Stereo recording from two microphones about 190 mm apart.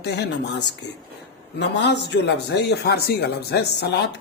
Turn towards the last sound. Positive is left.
turn(degrees=60)  # may be behind; listen again after turning